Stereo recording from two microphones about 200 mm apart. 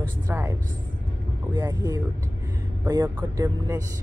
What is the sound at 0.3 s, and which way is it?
Speech, 10° right (ahead or behind).